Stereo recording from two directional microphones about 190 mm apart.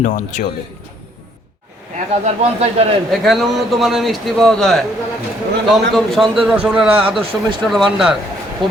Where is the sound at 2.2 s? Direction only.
35° right (ahead or behind).